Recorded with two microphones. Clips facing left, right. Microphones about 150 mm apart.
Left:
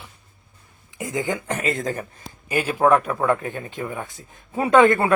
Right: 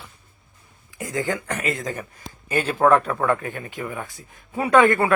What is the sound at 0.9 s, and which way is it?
Speech, 20° left (ahead or behind).